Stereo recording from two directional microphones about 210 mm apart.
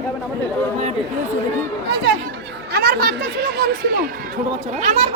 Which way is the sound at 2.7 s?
50° right (ahead or behind).